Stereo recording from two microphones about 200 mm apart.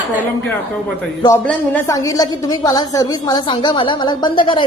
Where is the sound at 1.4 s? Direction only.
10° left (ahead or behind).